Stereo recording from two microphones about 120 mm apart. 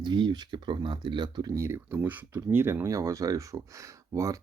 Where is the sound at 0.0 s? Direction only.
40° right (ahead or behind).